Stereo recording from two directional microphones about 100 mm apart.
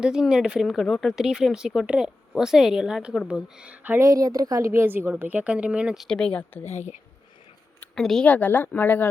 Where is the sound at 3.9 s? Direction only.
35° right (ahead or behind); by 6.1 s 10° right (ahead or behind).